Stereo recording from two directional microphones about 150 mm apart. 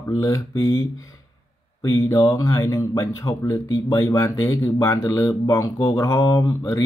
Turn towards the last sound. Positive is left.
turn(degrees=20)  # may be behind; listen again after turning